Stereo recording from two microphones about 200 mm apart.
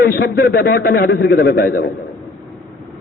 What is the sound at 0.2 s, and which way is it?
A man's voice, 50° left (ahead or behind).